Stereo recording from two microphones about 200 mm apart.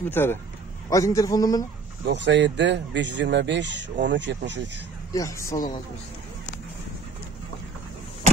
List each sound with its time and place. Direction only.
0.1 s a man's voice: 10° left (ahead or behind)
2.0 s speech: 60° right (ahead or behind)
5.1 s a man's voice: 15° left (ahead or behind)